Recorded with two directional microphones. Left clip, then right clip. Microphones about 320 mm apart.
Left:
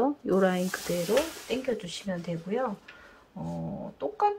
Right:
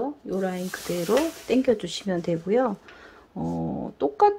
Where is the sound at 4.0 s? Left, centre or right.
Centre.